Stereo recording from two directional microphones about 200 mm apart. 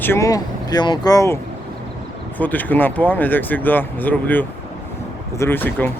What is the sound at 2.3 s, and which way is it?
Speech, 10° left (ahead or behind).